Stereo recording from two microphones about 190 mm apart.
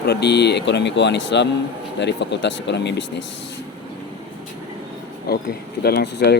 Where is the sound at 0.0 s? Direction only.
60° left (ahead or behind).